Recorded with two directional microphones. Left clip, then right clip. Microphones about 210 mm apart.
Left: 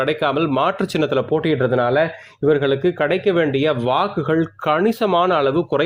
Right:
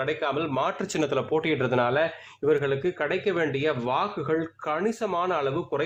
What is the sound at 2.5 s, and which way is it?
Speech, 30° left (ahead or behind).